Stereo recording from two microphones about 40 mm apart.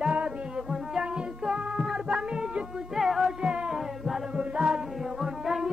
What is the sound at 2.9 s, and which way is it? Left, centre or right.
Music, centre.